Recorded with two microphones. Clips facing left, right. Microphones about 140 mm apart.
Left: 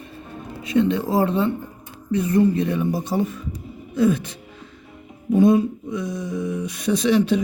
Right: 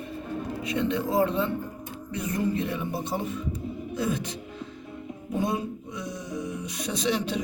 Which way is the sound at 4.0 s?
55° left (ahead or behind).